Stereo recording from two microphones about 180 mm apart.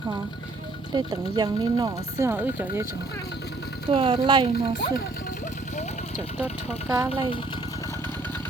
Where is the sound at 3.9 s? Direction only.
30° right (ahead or behind).